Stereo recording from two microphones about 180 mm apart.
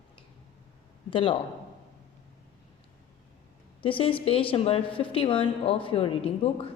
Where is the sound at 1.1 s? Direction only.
30° left (ahead or behind).